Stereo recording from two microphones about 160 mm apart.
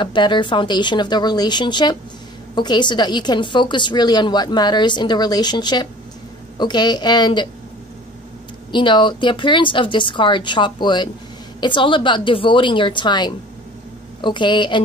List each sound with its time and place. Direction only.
0.0 s a woman's voice: 30° left (ahead or behind)
8.7 s a woman's voice: 30° left (ahead or behind)